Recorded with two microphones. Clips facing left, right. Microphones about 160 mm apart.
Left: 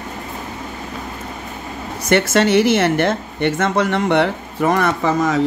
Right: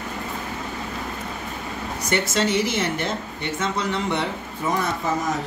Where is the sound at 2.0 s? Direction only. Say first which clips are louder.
Left 8 dB; 65° left (ahead or behind).